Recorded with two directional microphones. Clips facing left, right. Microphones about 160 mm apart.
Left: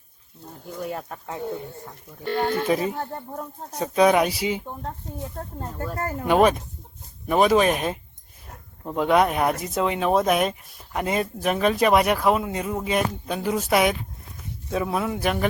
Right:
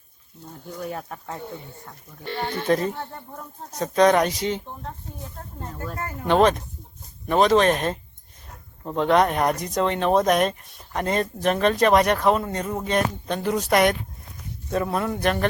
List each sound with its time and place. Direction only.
0.8 s speech: centre (ahead or behind)
2.2 s speech: 45° left (ahead or behind)
2.6 s speech: 5° left (ahead or behind)
6.0 s speech: 40° left (ahead or behind)
6.2 s speech: 10° left (ahead or behind)